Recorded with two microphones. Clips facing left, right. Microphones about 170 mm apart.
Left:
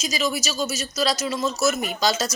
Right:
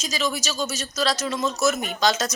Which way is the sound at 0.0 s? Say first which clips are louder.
Left 1 dB; 10° left (ahead or behind).